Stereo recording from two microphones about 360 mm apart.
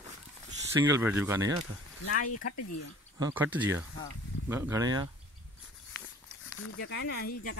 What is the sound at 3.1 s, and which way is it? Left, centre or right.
Speech, centre.